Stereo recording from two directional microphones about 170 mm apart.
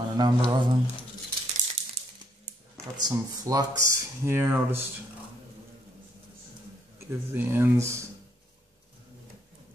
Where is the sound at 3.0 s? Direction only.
20° right (ahead or behind).